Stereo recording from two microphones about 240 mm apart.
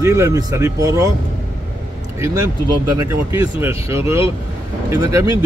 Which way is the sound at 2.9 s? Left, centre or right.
Centre.